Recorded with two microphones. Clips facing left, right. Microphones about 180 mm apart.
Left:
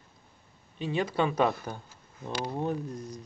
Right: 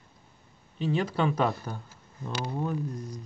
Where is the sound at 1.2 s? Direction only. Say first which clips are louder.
Left 3 dB; 20° left (ahead or behind).